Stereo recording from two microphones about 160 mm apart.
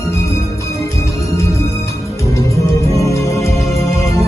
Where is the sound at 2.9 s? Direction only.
20° left (ahead or behind).